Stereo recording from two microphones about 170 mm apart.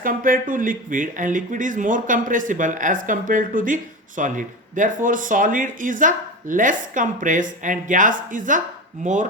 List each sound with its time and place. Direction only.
0.0 s speech: 55° right (ahead or behind)